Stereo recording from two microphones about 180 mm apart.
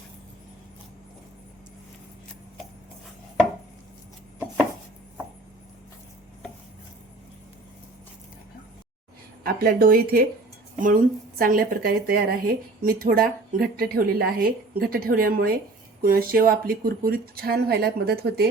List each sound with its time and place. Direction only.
9.4 s a woman's voice: 55° right (ahead or behind)